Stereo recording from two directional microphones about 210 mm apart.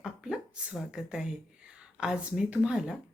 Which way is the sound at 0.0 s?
5° right (ahead or behind).